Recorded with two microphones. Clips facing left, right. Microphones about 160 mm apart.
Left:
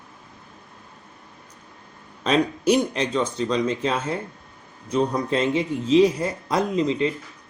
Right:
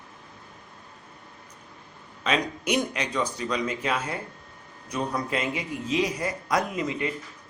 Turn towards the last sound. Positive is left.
turn(degrees=25)  # may be behind; listen again after turning